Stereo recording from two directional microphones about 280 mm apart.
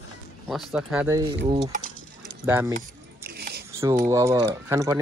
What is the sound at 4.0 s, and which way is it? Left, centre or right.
Speech, centre.